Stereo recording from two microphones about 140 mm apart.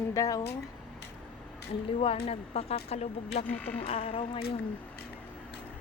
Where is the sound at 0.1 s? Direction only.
25° left (ahead or behind).